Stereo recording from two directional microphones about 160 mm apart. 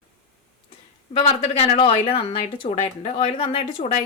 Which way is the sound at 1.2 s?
40° left (ahead or behind).